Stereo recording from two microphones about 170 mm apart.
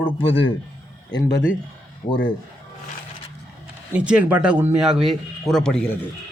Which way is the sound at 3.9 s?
5° right (ahead or behind).